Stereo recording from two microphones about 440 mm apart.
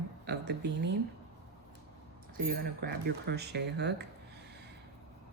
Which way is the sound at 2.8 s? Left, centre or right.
Right.